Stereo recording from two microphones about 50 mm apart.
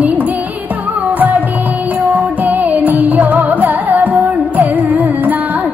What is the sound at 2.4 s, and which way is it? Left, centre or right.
Music, right.